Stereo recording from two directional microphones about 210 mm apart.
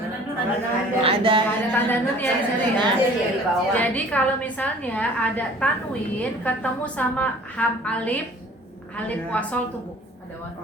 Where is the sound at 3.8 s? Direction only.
5° left (ahead or behind).